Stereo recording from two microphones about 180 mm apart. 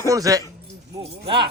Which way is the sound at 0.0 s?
20° right (ahead or behind).